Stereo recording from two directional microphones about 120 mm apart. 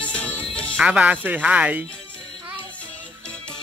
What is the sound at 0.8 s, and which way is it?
Speech, 10° right (ahead or behind).